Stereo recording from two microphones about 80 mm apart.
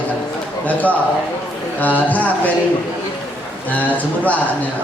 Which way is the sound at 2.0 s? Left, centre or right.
Centre.